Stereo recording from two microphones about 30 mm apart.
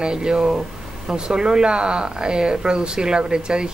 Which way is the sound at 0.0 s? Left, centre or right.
Right.